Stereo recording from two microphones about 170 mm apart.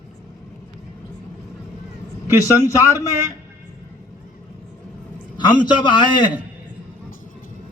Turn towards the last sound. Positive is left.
turn(degrees=25)  # may be behind; listen again after turning